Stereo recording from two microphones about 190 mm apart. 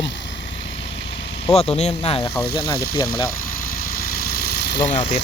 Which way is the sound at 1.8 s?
30° left (ahead or behind).